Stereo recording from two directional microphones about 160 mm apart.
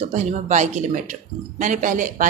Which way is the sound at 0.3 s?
45° right (ahead or behind).